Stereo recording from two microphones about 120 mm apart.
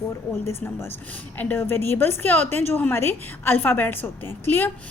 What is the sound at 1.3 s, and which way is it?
A woman's voice, 15° left (ahead or behind).